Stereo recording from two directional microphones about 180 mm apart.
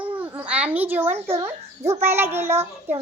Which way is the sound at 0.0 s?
10° right (ahead or behind).